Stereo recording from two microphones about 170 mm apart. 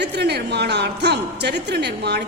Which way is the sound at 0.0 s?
75° right (ahead or behind).